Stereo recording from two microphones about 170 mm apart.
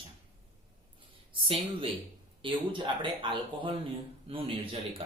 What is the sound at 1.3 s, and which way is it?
Speech, 35° right (ahead or behind).